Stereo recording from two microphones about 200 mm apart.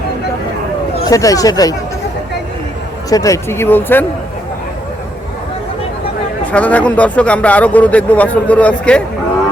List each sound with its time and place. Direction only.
1.0 s speech: 15° left (ahead or behind)
3.1 s speech: 15° left (ahead or behind)
6.4 s speech: 5° left (ahead or behind)